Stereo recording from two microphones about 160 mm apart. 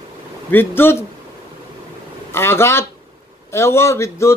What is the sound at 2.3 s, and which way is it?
A man's voice, 15° left (ahead or behind).